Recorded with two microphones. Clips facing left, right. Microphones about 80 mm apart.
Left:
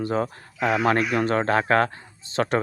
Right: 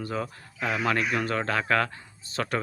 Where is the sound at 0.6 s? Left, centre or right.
Left.